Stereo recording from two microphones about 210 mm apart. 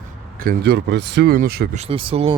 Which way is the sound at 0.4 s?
50° right (ahead or behind).